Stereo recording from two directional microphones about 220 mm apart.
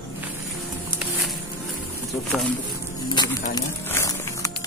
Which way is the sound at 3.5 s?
10° left (ahead or behind).